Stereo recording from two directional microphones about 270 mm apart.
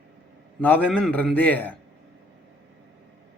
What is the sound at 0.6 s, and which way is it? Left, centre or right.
A man's voice, centre.